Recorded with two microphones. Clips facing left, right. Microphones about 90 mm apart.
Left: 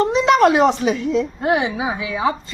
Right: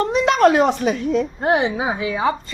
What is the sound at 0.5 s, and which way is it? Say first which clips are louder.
Speech: left 1 dB; 55° right (ahead or behind).